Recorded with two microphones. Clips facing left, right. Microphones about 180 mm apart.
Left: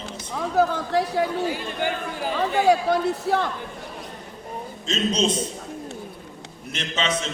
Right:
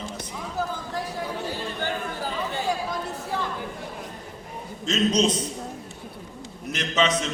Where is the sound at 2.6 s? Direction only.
70° left (ahead or behind).